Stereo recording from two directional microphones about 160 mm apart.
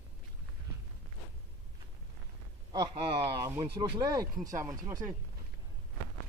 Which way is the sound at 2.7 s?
30° right (ahead or behind).